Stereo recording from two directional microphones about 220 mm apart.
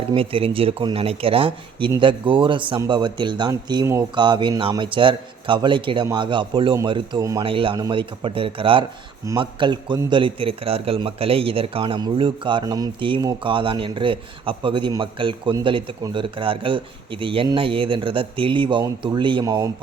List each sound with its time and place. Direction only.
0.1 s a man's voice: 25° right (ahead or behind)